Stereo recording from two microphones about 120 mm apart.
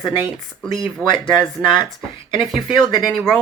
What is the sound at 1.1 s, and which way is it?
Speech, 40° left (ahead or behind).